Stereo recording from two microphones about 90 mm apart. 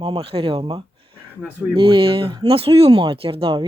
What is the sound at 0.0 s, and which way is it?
Speech, 85° right.